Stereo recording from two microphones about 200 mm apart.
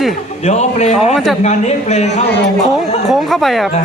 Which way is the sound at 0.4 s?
35° left (ahead or behind).